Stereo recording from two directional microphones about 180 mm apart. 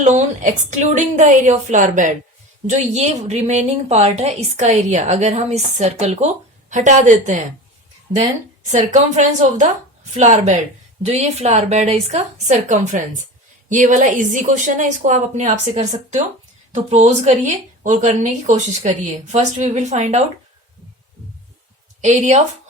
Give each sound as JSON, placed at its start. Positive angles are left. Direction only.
{"t": 0.0, "sound": "a woman's voice", "side_deg": -40}
{"t": 8.7, "sound": "a woman's voice", "side_deg": -40}
{"t": 22.0, "sound": "a woman's voice", "side_deg": -40}